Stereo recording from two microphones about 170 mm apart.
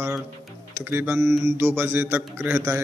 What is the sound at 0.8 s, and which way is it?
Mantra, 15° right (ahead or behind).